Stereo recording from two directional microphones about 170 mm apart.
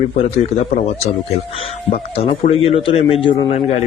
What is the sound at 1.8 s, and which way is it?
Speech, 35° left (ahead or behind).